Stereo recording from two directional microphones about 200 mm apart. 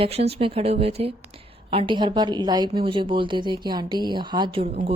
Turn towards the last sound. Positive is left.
turn(degrees=-25)  # may be behind; listen again after turning